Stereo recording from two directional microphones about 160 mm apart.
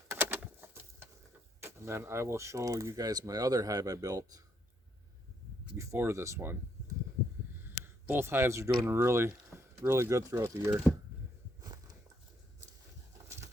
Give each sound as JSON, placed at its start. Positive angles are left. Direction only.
{"t": 0.1, "sound": "bird", "side_deg": -10}
{"t": 1.6, "sound": "speech", "side_deg": -15}
{"t": 5.7, "sound": "speech", "side_deg": -20}